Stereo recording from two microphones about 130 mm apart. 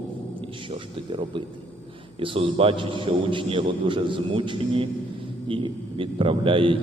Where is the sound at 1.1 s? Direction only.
40° right (ahead or behind).